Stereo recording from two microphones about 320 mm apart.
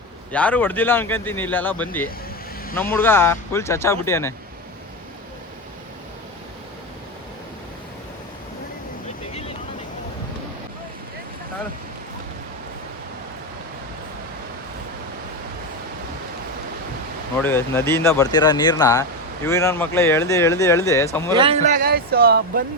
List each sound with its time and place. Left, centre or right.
0.3 s speech: centre
17.4 s speech: centre
21.3 s a man's voice: centre